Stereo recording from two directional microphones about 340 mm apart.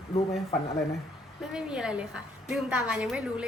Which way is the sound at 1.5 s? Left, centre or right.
Centre.